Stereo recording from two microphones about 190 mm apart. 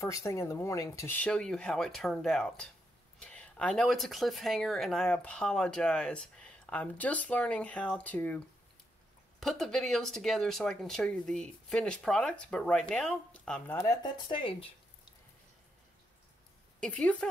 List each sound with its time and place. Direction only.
0.0 s speech: 15° left (ahead or behind)
9.4 s speech: centre (ahead or behind)
14.0 s speech: 25° left (ahead or behind)
16.8 s speech: 5° left (ahead or behind)